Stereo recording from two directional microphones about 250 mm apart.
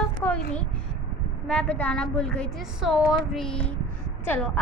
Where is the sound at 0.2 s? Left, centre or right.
Centre.